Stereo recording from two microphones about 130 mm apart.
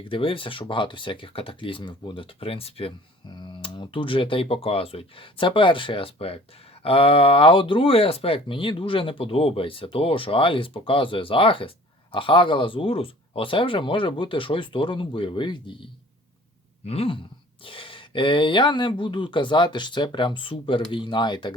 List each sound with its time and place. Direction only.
0.0 s speech: 40° left (ahead or behind)